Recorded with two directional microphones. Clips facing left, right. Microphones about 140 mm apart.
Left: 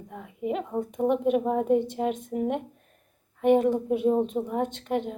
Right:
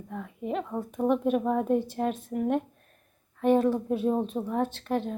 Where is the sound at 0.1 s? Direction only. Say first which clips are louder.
Left 2 dB; 15° left (ahead or behind).